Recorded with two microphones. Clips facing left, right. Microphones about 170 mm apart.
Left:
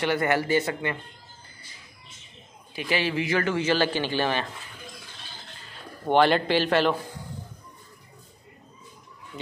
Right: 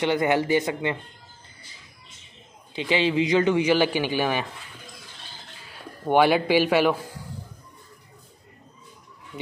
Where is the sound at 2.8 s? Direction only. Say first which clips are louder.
Right 4 dB; 20° right (ahead or behind).